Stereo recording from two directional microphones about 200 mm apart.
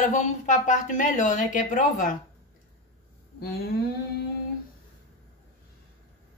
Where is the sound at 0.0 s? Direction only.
40° left (ahead or behind).